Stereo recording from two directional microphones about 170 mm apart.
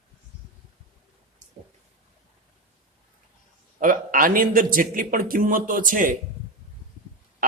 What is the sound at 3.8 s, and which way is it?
A man's voice, 55° right (ahead or behind).